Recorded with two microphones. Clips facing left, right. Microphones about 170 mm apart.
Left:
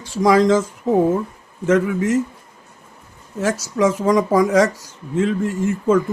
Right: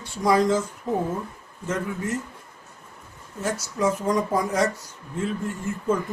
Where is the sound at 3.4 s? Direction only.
90° left.